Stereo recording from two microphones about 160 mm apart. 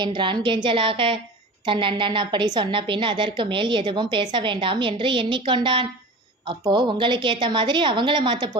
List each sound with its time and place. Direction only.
0.0 s a woman's voice: 30° right (ahead or behind)